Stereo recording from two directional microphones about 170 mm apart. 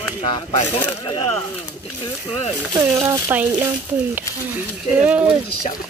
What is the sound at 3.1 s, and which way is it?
Speech, 15° right (ahead or behind).